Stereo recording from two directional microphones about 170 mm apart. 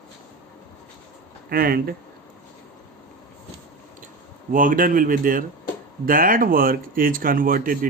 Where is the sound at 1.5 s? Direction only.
60° right (ahead or behind).